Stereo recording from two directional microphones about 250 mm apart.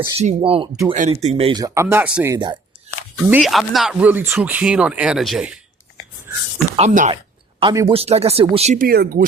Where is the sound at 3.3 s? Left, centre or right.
Centre.